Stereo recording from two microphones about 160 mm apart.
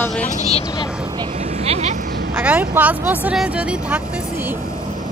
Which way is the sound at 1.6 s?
40° right (ahead or behind).